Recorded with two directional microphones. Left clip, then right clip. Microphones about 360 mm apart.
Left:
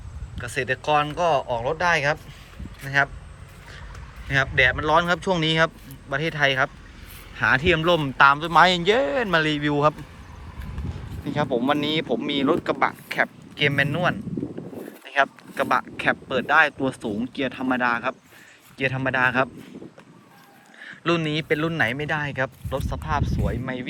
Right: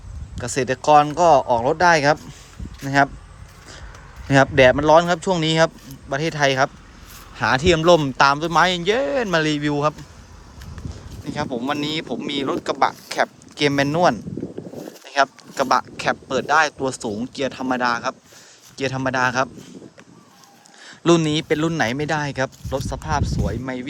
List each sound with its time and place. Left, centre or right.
0.3 s speech: centre
4.3 s speech: centre
11.3 s speech: centre
20.8 s speech: centre